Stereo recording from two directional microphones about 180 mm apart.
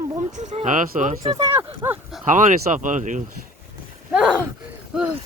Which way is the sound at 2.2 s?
45° right (ahead or behind).